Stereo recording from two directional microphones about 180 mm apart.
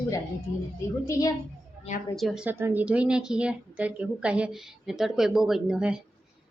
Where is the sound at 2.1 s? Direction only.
Centre (ahead or behind).